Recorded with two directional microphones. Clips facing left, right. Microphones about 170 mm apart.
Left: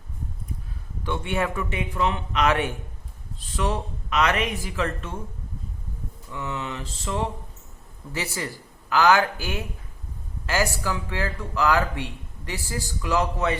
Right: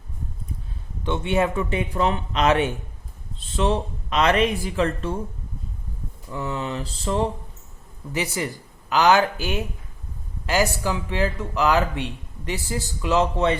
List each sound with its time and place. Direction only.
1.0 s speech: 20° right (ahead or behind)
1.7 s speech: 35° right (ahead or behind)
6.3 s speech: 35° right (ahead or behind)
8.1 s speech: 15° right (ahead or behind)